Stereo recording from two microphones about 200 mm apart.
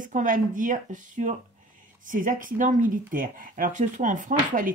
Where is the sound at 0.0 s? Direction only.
40° right (ahead or behind).